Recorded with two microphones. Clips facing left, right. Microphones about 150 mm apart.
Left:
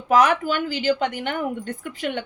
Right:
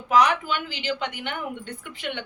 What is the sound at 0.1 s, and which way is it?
A woman's voice, 45° left (ahead or behind).